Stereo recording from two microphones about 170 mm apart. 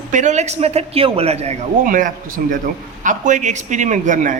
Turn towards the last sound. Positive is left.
turn(degrees=-50)  # may be behind; listen again after turning